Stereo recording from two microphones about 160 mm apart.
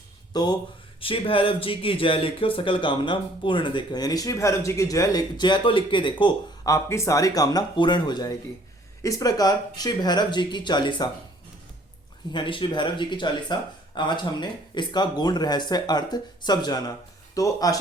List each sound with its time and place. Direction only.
0.3 s speech: 25° left (ahead or behind)
6.7 s speech: 15° left (ahead or behind)
12.3 s speech: 30° left (ahead or behind)